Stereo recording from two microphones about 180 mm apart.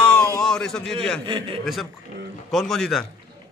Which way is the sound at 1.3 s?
25° right (ahead or behind).